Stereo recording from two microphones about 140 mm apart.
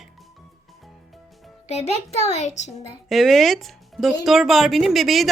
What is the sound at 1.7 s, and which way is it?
A child's voice, 50° left (ahead or behind).